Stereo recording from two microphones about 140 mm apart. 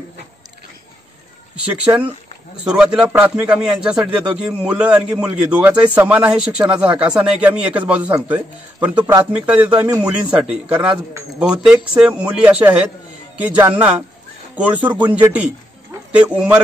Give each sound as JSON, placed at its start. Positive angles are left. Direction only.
{"t": 1.9, "sound": "speech", "side_deg": -25}
{"t": 2.5, "sound": "speech", "side_deg": -5}